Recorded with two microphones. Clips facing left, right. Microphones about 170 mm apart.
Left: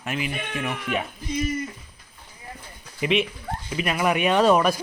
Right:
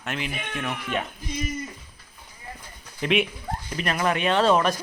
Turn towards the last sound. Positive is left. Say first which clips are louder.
# left 2 dB
turn(degrees=10)  # may be behind; listen again after turning